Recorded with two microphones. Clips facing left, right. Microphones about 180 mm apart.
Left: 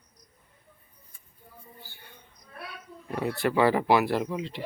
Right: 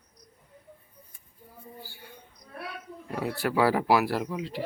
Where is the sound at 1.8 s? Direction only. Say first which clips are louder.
Right 4 dB; 10° right (ahead or behind).